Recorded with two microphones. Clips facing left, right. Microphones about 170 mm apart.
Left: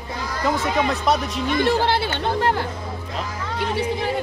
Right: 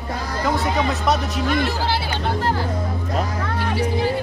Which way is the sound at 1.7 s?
60° left (ahead or behind).